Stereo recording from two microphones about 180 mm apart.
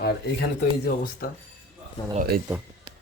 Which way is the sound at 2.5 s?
10° right (ahead or behind).